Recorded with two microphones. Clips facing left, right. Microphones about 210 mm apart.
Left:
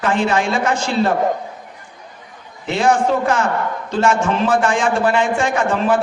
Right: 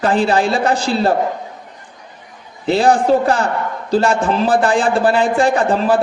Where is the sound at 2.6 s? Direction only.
35° right (ahead or behind).